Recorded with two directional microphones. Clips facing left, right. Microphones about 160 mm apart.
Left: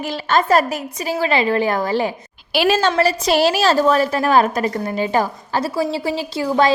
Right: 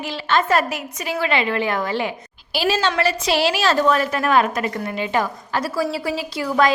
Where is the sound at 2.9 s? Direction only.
35° left (ahead or behind).